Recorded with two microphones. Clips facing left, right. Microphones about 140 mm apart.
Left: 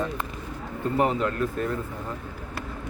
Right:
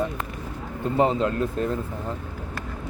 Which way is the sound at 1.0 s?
25° right (ahead or behind).